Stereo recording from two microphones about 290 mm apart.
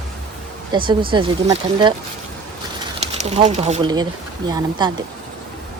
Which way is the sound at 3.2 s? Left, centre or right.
Right.